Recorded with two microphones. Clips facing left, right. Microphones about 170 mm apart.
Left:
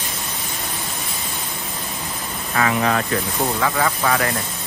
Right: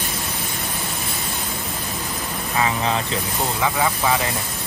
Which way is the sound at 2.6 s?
20° right (ahead or behind).